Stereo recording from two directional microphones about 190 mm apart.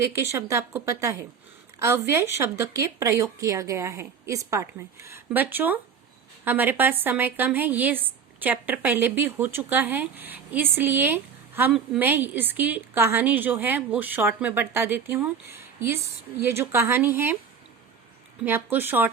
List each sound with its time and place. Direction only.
0.0 s a woman's voice: 15° right (ahead or behind)
18.4 s a woman's voice: 10° right (ahead or behind)